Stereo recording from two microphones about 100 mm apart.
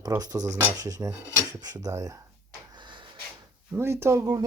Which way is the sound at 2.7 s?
50° right (ahead or behind).